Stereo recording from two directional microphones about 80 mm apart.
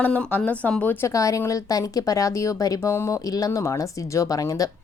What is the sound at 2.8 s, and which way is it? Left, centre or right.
A woman's voice, left.